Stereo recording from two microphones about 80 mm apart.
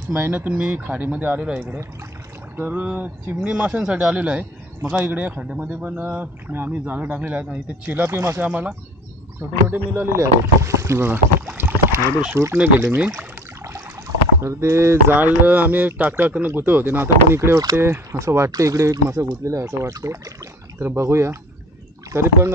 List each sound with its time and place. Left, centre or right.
0.1 s speech: right
10.1 s rowboat: right
12.5 s speech: right
13.7 s speech: right